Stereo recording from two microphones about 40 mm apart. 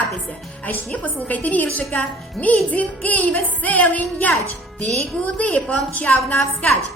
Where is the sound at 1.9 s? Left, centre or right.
Left.